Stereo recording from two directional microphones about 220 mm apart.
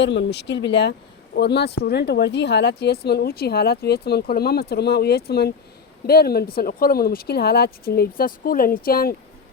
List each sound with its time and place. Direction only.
0.0 s speech: 55° left (ahead or behind)